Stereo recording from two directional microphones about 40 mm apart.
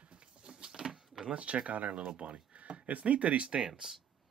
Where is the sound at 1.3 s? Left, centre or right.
Right.